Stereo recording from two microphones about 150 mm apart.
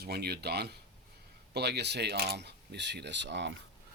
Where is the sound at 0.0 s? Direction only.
90° right.